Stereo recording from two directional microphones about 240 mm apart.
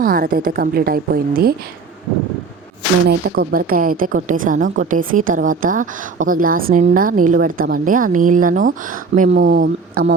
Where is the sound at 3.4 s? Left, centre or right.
Right.